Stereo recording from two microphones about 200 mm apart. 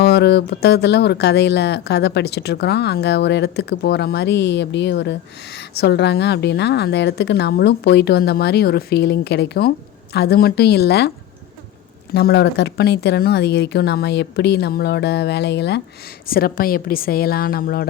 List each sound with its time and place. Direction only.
0.0 s a woman's voice: 55° left (ahead or behind)
12.1 s a woman's voice: 55° left (ahead or behind)
16.2 s a woman's voice: 45° left (ahead or behind)